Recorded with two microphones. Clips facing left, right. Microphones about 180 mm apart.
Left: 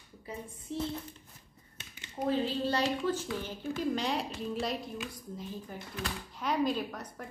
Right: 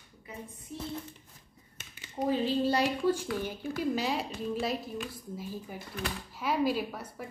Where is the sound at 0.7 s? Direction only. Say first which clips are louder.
Left 6 dB; 30° left (ahead or behind).